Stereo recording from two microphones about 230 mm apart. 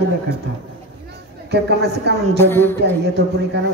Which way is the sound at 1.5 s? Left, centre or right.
Right.